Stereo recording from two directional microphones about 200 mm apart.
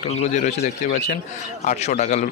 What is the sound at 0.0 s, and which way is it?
A man's voice, 35° left (ahead or behind).